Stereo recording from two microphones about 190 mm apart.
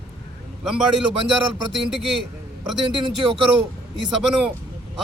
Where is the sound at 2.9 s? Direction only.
25° right (ahead or behind).